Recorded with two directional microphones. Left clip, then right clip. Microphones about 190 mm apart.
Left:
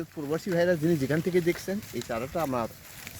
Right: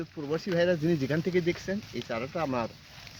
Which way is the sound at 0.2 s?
40° left (ahead or behind).